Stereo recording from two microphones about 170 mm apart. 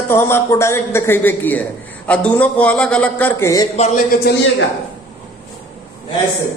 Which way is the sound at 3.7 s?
40° left (ahead or behind).